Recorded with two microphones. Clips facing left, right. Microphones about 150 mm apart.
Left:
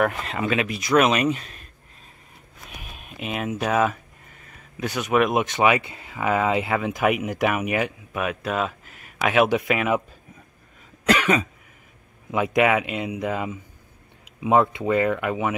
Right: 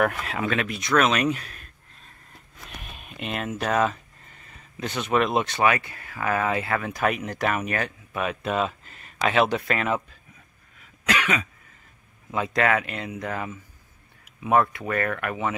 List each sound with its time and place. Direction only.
0.0 s speech: centre (ahead or behind)
11.1 s cough: 35° left (ahead or behind)
12.3 s speech: 15° left (ahead or behind)